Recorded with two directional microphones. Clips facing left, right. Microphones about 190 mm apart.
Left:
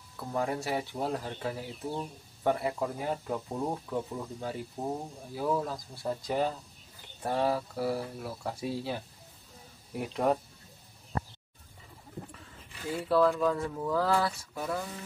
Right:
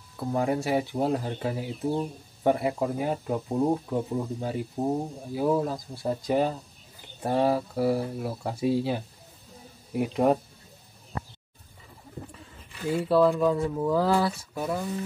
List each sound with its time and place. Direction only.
0.2 s speech: 20° right (ahead or behind)
13.1 s speech: 15° right (ahead or behind)